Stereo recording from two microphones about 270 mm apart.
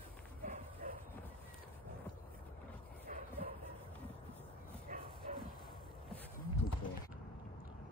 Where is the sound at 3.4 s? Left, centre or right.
Right.